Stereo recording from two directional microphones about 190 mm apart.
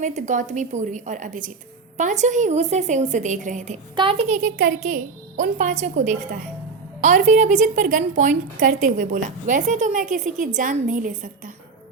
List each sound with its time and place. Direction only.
0.0 s a woman's voice: 40° right (ahead or behind)
3.9 s a woman's voice: 25° right (ahead or behind); by 11.5 s 45° right (ahead or behind)